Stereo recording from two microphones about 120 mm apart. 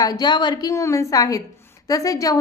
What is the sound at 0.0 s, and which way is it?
Speech, 35° left (ahead or behind).